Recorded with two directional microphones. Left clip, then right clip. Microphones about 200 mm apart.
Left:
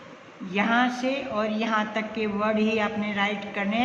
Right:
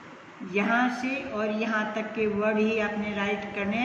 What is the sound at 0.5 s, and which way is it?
A woman's voice, 50° left (ahead or behind).